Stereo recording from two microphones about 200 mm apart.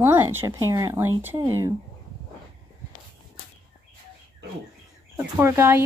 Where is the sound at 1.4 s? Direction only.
20° right (ahead or behind).